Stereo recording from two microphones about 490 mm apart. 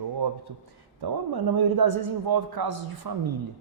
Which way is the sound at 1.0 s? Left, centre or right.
Right.